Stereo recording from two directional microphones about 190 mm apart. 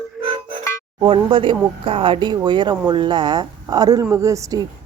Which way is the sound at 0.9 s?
25° right (ahead or behind).